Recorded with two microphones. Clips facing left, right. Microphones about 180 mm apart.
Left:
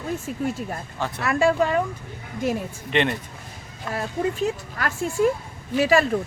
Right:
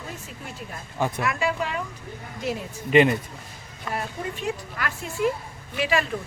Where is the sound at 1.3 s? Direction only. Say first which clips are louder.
Left 7 dB; 45° left (ahead or behind).